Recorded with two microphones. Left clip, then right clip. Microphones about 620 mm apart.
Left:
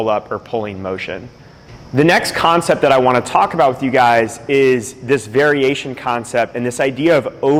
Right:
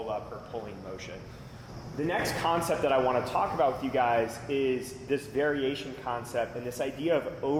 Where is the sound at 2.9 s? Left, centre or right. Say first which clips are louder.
Left 13 dB; left.